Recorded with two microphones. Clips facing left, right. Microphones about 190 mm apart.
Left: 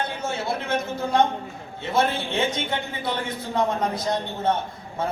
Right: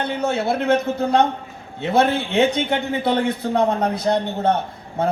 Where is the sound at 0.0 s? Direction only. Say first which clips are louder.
Right 7 dB; 65° right (ahead or behind).